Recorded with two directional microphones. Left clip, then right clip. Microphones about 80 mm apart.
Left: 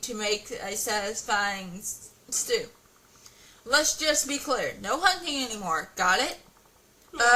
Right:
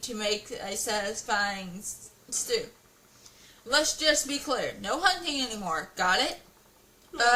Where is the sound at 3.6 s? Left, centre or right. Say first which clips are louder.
Left 1 dB; left.